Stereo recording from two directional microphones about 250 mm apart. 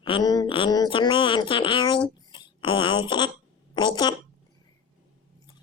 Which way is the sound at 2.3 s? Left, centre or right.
Centre.